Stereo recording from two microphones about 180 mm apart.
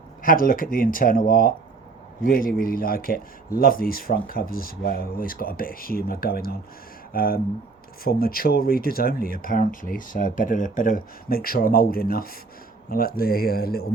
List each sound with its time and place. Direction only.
0.2 s a man's voice: 50° left (ahead or behind)